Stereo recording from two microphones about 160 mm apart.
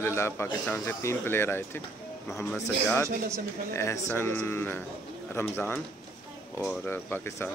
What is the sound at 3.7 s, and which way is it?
A man's voice, 15° left (ahead or behind).